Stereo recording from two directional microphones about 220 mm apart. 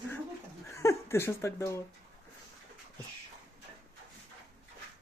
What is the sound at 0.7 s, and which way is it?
Speech, 15° left (ahead or behind).